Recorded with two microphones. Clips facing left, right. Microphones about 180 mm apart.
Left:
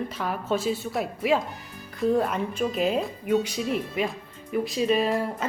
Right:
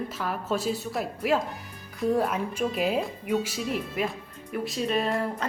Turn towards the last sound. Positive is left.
turn(degrees=0)  # may be behind; listen again after turning